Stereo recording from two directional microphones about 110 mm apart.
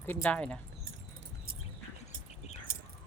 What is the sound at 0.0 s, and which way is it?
Speech, 15° left (ahead or behind).